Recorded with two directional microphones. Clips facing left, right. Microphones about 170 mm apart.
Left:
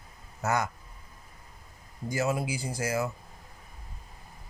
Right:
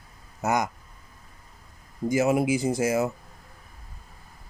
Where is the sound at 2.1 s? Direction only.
20° right (ahead or behind).